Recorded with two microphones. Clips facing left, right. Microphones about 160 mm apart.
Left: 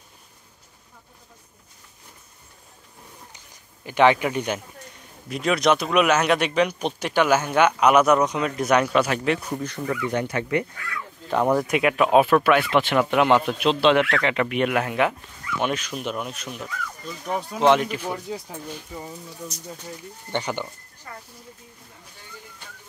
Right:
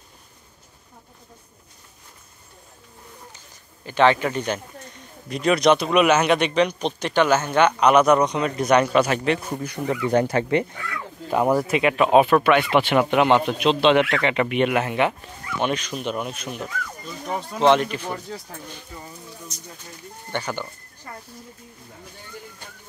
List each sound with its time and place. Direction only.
3.3 s a sound: 15° left (ahead or behind)
5.3 s a man's voice: centre (ahead or behind)
9.5 s speech: 10° right (ahead or behind)
9.8 s speech: 35° right (ahead or behind)
11.2 s a man's voice: 5° right (ahead or behind); by 19.1 s 15° left (ahead or behind)
20.2 s speech: 20° left (ahead or behind)